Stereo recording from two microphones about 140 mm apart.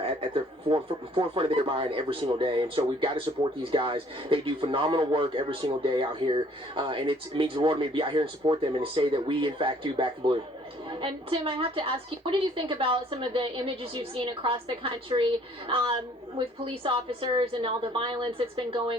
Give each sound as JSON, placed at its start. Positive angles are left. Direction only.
{"t": 0.0, "sound": "speech", "side_deg": -40}